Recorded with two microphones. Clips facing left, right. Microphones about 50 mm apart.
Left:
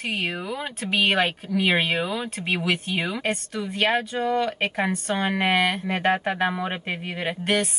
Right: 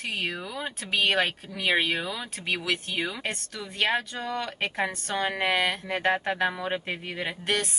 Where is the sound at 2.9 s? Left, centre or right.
Centre.